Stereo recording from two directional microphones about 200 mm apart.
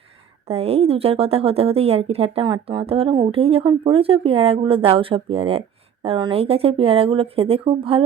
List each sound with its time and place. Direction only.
0.4 s a woman's voice: 30° right (ahead or behind)